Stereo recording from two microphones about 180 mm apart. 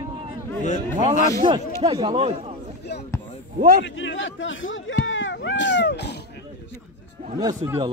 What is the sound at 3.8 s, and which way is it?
Speech, 90° left.